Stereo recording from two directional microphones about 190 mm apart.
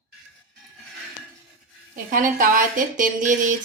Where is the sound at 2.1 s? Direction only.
45° right (ahead or behind).